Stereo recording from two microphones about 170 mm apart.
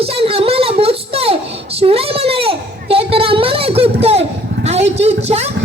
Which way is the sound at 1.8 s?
35° right (ahead or behind).